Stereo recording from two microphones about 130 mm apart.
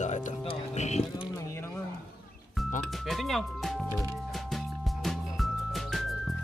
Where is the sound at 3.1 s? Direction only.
Centre (ahead or behind).